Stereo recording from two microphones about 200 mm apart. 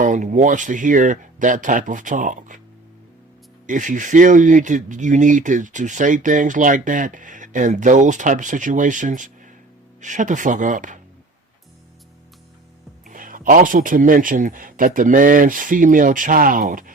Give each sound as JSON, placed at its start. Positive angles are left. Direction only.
{"t": 0.0, "sound": "speech", "side_deg": -40}
{"t": 3.7, "sound": "speech", "side_deg": -40}
{"t": 13.1, "sound": "speech", "side_deg": -40}